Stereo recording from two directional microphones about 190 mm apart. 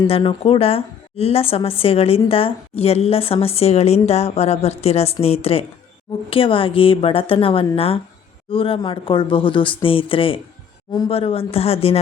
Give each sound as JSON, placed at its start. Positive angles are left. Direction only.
{"t": 0.1, "sound": "a woman's voice", "side_deg": 30}